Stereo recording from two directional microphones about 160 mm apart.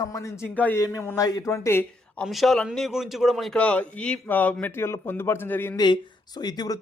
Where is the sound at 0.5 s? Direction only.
10° left (ahead or behind).